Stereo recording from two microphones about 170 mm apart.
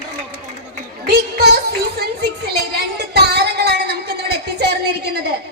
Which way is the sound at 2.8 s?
75° right (ahead or behind).